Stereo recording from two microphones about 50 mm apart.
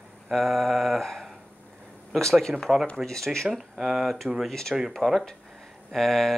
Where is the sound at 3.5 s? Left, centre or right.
Centre.